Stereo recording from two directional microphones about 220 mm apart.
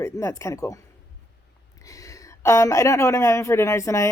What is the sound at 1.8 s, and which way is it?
Speech, 15° left (ahead or behind).